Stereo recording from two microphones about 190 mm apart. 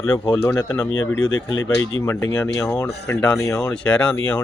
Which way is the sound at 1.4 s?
15° left (ahead or behind).